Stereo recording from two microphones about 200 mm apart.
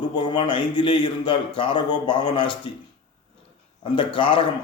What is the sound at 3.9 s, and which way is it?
Speech, 25° left (ahead or behind).